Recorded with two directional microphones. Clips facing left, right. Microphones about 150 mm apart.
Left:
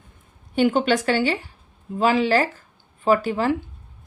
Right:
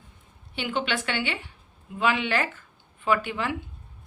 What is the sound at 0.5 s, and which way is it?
Speech, 45° left (ahead or behind).